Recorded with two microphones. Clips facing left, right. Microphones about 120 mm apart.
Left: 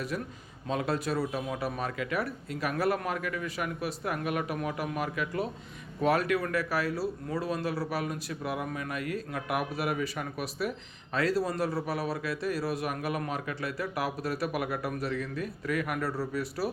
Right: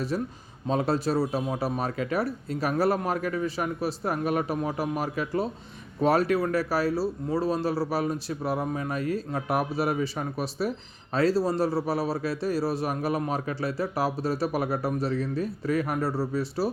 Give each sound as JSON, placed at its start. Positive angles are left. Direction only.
{"t": 0.1, "sound": "speech", "side_deg": -35}